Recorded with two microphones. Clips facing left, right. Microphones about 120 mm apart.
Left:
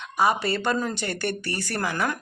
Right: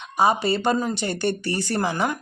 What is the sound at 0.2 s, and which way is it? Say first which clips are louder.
Speech: right 3 dB; 20° right (ahead or behind).